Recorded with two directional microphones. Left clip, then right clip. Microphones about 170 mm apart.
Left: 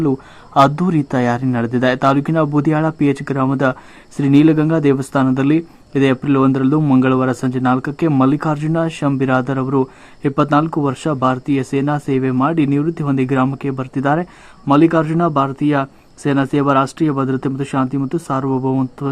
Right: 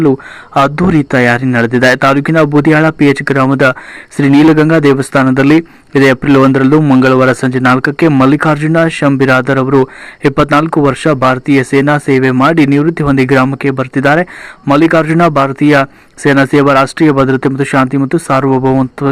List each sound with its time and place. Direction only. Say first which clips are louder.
0.0 s a man's voice: right 8 dB; 20° right (ahead or behind)